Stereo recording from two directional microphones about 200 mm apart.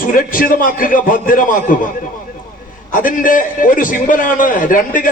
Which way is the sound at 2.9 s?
40° left (ahead or behind).